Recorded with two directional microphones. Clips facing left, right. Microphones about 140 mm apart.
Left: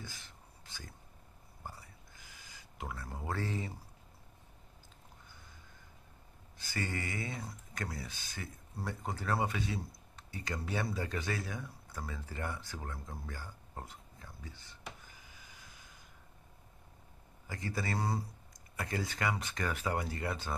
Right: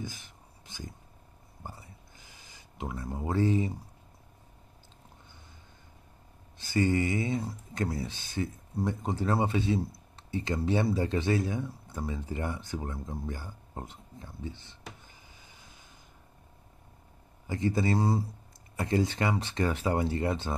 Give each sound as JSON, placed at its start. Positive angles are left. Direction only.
{"t": 0.0, "sound": "a sound", "side_deg": -15}
{"t": 1.6, "sound": "whispering", "side_deg": -20}
{"t": 2.8, "sound": "speech", "side_deg": -20}
{"t": 6.6, "sound": "speech", "side_deg": -20}
{"t": 17.5, "sound": "speech", "side_deg": -25}